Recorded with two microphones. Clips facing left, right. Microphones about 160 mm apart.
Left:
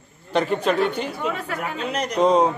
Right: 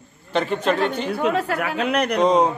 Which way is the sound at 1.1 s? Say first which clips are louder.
Right 6 dB; 75° right (ahead or behind).